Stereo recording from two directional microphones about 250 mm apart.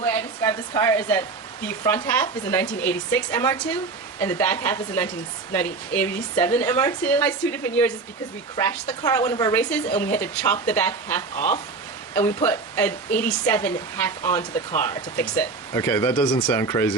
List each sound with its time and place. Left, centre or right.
0.0 s a woman's voice: centre
11.3 s speech: left
12.1 s a woman's voice: centre
16.2 s a woman's voice: centre